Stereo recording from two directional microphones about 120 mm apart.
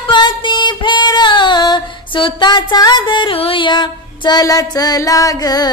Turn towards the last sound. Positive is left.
turn(degrees=30)  # may be behind; listen again after turning